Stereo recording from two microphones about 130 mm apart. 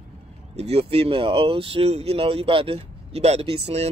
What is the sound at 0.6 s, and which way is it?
Speech, 50° right (ahead or behind).